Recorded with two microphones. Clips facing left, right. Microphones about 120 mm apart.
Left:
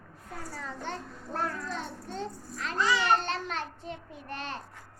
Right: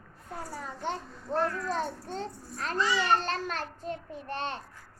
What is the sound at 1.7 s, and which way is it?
A child's voice, 35° right (ahead or behind).